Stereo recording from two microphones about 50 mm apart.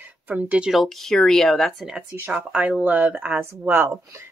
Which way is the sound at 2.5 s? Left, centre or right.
Right.